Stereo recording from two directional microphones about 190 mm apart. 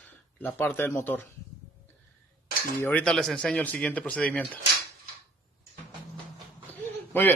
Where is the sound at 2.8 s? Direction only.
10° left (ahead or behind).